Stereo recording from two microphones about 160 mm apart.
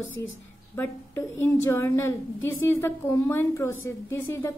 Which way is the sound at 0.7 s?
15° left (ahead or behind).